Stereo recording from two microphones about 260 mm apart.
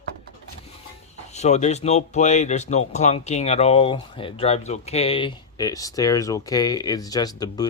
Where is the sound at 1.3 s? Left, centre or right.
Left.